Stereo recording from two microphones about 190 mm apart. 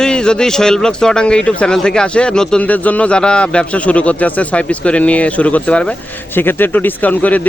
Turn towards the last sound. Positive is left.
turn(degrees=10)  # may be behind; listen again after turning